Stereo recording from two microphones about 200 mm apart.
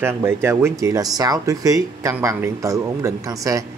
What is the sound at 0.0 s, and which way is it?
Speech, 10° right (ahead or behind).